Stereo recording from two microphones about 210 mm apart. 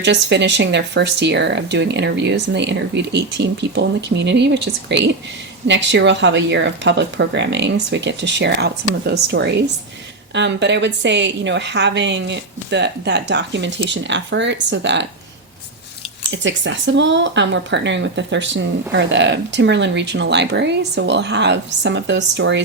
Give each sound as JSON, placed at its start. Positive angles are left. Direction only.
{"t": 0.0, "sound": "speech", "side_deg": -55}
{"t": 16.3, "sound": "speech", "side_deg": -60}